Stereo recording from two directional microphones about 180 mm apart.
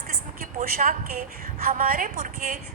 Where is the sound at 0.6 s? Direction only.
50° right (ahead or behind).